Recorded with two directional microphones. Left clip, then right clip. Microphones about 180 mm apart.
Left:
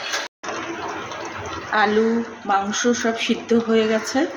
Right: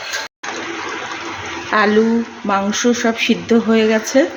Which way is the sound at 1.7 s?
55° right (ahead or behind).